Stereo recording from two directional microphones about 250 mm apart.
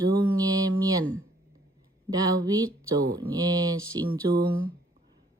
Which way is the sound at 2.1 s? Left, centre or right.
Centre.